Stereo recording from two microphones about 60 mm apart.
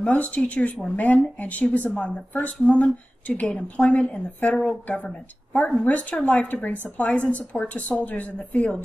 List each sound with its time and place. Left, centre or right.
0.1 s a woman's voice: left